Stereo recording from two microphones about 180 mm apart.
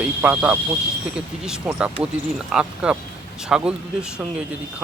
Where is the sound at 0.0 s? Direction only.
5° right (ahead or behind).